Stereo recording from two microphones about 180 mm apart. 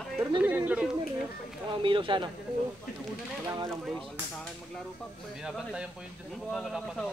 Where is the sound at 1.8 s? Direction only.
30° right (ahead or behind).